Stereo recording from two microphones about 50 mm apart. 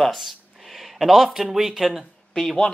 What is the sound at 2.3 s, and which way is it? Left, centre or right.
Speech, centre.